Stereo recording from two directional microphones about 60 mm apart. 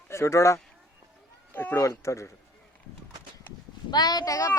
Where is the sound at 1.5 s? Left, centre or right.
Left.